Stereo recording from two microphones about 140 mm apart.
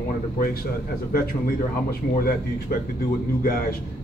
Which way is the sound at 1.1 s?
90° left.